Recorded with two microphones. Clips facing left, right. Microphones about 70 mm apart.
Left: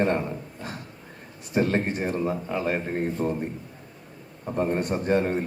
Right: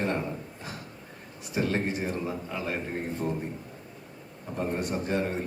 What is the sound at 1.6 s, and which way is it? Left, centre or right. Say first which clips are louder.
A man's voice: left 4 dB; left.